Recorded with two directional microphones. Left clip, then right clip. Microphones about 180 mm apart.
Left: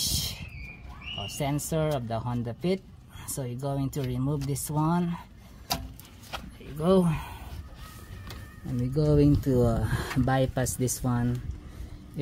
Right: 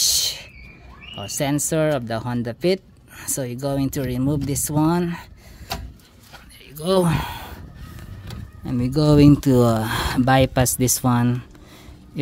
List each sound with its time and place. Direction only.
0.0 s a sound: 45° right (ahead or behind)
1.2 s speech: 45° right (ahead or behind)
6.9 s speech: 55° right (ahead or behind)
8.6 s speech: 45° right (ahead or behind)